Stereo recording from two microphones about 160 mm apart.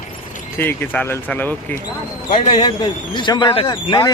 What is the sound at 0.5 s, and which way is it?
Speech, 10° left (ahead or behind).